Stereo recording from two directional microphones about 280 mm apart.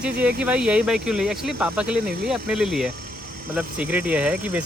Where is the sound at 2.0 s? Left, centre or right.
Right.